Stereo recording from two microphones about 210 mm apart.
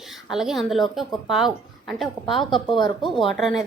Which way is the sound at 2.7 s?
20° left (ahead or behind).